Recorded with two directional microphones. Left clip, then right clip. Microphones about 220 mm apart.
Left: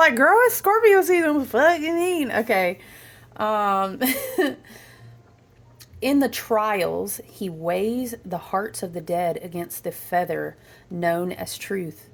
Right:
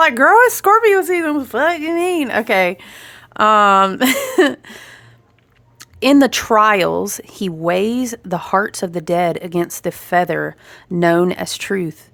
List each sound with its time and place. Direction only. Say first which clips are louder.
0.0 s speech: right 5 dB; 20° right (ahead or behind); by 4.9 s 35° right (ahead or behind)
6.0 s speech: right 9 dB; 35° right (ahead or behind)